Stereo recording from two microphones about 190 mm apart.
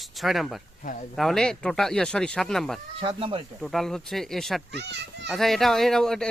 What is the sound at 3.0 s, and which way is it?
Speech, 30° right (ahead or behind).